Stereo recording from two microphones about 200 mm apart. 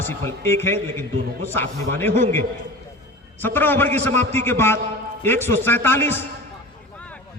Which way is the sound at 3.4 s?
10° left (ahead or behind).